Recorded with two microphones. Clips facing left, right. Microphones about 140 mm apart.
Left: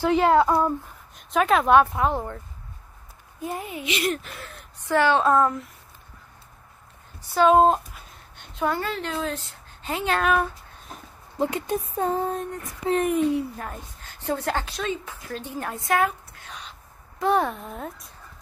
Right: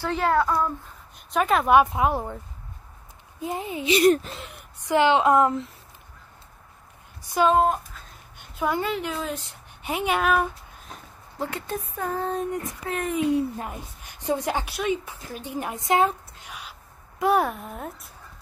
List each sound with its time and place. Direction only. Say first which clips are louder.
0.0 s speech: left 4 dB; 15° left (ahead or behind)
1.1 s speech: left 2 dB; centre (ahead or behind)
1.8 s a woman's voice: even; 10° right (ahead or behind)
3.3 s a child's voice: right 2 dB; 20° right (ahead or behind)
3.9 s speech: right 9 dB; 40° right (ahead or behind)
4.4 s speech: even; 15° right (ahead or behind)
7.2 s a sound: left 1 dB; 10° right (ahead or behind)
7.5 s speech: left 4 dB; 25° left (ahead or behind)
8.4 s a woman's voice: even; 10° right (ahead or behind)
10.3 s speech: even; centre (ahead or behind)
11.3 s speech: left 5 dB; 20° left (ahead or behind)
13.3 s a woman's voice: right 2 dB; 20° right (ahead or behind)
16.4 s owl: even; 10° right (ahead or behind)
17.2 s speech: right 1 dB; 5° right (ahead or behind)